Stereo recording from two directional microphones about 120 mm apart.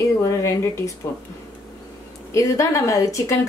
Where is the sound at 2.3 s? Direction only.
25° left (ahead or behind).